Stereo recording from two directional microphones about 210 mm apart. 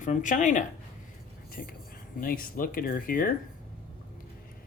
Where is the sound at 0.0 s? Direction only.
35° left (ahead or behind).